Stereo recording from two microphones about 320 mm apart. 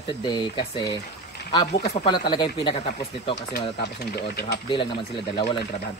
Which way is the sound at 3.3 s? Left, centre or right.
Left.